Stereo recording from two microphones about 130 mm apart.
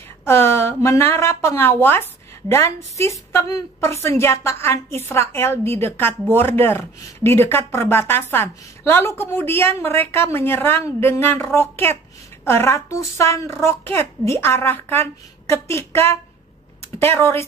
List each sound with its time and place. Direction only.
0.2 s a woman's voice: 20° left (ahead or behind)